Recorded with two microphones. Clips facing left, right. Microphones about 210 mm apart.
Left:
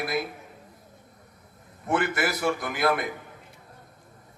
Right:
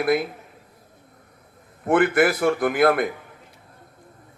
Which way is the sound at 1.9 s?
55° right (ahead or behind).